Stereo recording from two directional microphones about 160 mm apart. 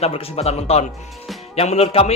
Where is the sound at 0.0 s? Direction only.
40° left (ahead or behind).